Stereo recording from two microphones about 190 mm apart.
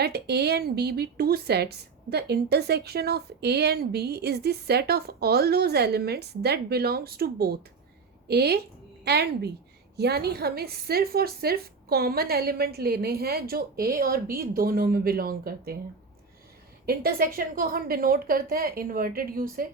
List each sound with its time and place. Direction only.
0.0 s a woman's voice: 60° right (ahead or behind)
16.8 s a woman's voice: 50° right (ahead or behind)